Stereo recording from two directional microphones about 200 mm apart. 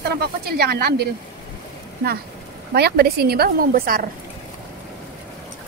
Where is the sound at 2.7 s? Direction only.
55° right (ahead or behind).